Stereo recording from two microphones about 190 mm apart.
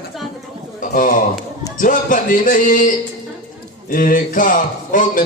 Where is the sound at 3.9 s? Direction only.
45° left (ahead or behind).